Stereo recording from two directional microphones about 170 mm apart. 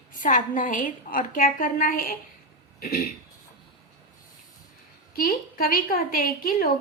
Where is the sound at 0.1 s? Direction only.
50° left (ahead or behind); by 3.1 s 65° left (ahead or behind).